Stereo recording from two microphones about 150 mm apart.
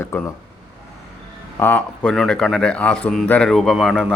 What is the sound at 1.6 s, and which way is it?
A man's voice, 10° left (ahead or behind).